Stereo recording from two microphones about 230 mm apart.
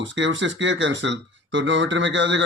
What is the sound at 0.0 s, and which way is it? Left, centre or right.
Speech, right.